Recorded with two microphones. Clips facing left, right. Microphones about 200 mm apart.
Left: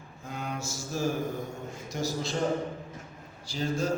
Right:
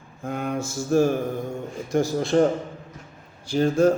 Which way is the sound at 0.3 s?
55° right (ahead or behind).